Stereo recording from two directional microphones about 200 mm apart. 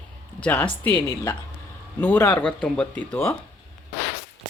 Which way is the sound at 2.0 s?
10° left (ahead or behind).